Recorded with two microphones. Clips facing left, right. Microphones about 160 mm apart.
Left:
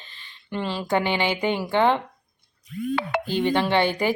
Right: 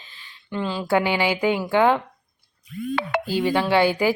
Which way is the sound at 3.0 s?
75° right (ahead or behind).